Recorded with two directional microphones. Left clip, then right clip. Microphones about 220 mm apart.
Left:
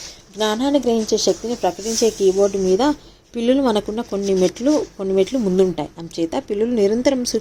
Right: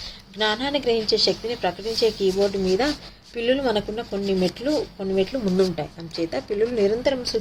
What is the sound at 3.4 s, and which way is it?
A woman's voice, 35° left (ahead or behind).